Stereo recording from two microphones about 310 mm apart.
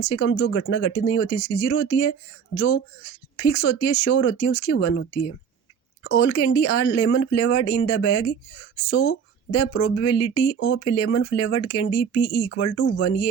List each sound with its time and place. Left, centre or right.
0.0 s speech: left
6.0 s speech: left
6.2 s speech: left
10.4 s speech: left
10.8 s speech: left